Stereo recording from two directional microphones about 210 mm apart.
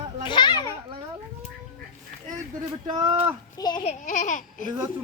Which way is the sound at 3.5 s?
20° left (ahead or behind).